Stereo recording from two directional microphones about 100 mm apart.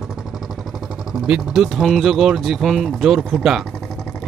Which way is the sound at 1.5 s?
Centre (ahead or behind).